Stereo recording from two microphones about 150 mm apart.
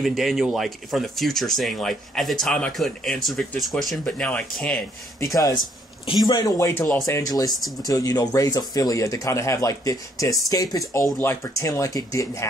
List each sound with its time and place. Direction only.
0.0 s speech: centre (ahead or behind)
5.3 s speech: 25° left (ahead or behind)